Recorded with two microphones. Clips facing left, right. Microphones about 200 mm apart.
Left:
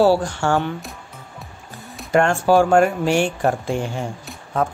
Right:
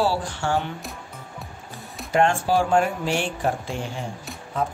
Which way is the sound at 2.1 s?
50° left (ahead or behind).